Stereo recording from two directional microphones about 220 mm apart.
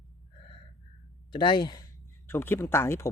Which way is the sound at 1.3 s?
20° left (ahead or behind).